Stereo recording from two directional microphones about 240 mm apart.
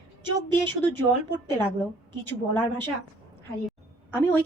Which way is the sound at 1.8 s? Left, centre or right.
Centre.